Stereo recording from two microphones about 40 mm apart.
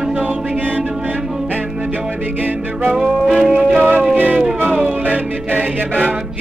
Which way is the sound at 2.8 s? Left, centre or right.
Centre.